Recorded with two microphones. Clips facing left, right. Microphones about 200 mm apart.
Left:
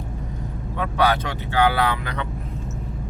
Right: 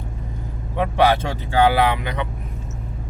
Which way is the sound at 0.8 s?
25° right (ahead or behind).